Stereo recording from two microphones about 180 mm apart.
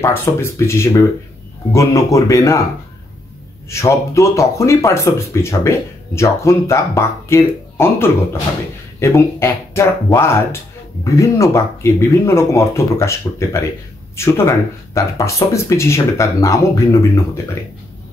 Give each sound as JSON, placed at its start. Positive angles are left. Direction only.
{"t": 0.0, "sound": "speech", "side_deg": 15}
{"t": 3.6, "sound": "speech", "side_deg": 15}